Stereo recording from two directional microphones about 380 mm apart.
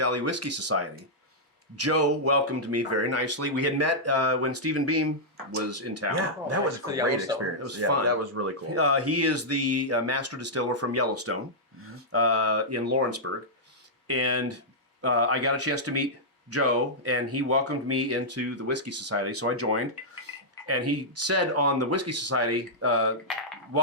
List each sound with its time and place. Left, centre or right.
0.0 s speech: right
7.6 s speech: right